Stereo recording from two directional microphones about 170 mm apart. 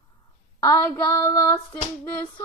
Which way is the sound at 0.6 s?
20° left (ahead or behind).